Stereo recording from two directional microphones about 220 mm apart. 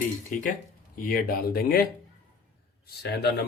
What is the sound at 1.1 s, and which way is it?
Speech, 45° left (ahead or behind).